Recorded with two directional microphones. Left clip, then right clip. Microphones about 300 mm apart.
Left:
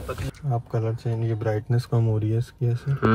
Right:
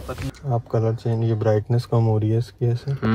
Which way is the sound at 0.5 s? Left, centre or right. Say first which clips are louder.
Right 6 dB; right.